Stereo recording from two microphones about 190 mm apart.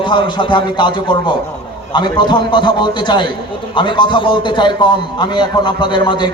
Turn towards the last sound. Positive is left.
turn(degrees=25)  # may be behind; listen again after turning